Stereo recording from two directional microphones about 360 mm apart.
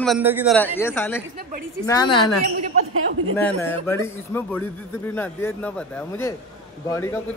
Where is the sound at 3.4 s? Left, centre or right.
Centre.